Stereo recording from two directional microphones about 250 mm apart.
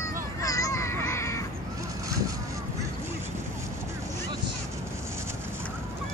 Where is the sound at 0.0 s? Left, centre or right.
Centre.